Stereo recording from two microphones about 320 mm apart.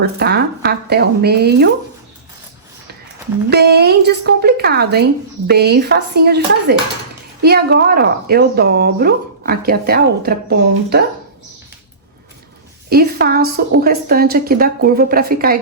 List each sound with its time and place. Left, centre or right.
0.0 s a woman's voice: right
3.5 s a woman's voice: right
12.9 s a woman's voice: right